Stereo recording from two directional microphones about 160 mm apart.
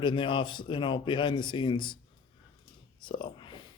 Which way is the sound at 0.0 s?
30° left (ahead or behind).